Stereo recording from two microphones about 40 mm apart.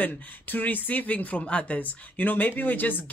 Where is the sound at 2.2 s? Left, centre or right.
Left.